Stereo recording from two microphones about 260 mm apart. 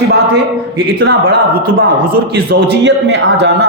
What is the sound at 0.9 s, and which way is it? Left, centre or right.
A man's voice, right.